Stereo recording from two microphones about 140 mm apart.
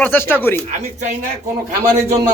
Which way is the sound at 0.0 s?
15° left (ahead or behind).